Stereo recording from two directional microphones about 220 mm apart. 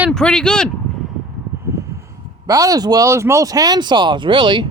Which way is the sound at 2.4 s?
15° right (ahead or behind).